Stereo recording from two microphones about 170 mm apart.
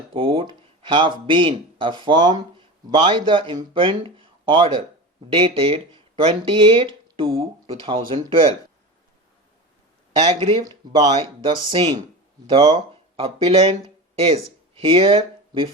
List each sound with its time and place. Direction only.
0.1 s speech: 30° right (ahead or behind)
10.2 s speech: 35° right (ahead or behind)
10.7 s speech: 25° right (ahead or behind)
14.8 s speech: 35° right (ahead or behind)